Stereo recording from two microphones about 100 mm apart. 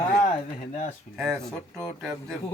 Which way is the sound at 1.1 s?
5° left (ahead or behind).